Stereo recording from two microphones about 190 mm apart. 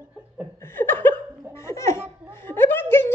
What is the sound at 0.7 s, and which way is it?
Laughter, 10° left (ahead or behind).